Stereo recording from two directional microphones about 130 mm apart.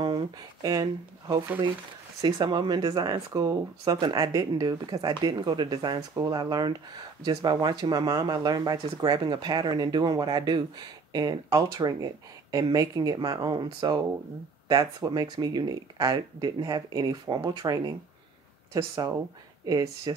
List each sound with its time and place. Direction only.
0.0 s speech: 35° right (ahead or behind)